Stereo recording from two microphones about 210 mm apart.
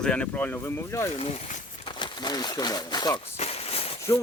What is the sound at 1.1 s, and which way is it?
Speech, 30° left (ahead or behind).